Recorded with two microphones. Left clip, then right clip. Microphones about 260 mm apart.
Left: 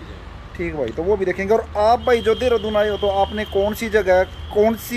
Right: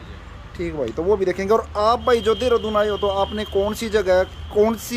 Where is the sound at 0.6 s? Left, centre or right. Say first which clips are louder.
Left 1 dB; centre.